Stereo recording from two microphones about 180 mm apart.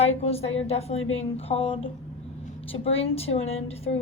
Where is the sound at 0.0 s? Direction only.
35° left (ahead or behind).